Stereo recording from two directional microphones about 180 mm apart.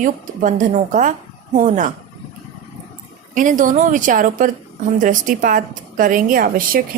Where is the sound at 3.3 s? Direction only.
45° right (ahead or behind).